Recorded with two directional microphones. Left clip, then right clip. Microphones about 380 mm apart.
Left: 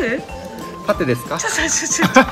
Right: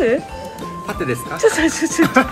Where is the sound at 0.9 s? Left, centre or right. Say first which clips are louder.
Left 5 dB; centre.